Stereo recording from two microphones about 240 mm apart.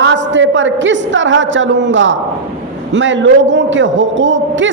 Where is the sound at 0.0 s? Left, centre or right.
Right.